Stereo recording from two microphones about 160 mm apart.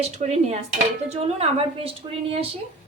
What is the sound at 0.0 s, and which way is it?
A woman's voice, 40° right (ahead or behind).